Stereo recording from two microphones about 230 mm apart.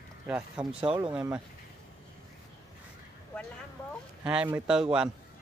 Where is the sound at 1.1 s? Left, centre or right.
Centre.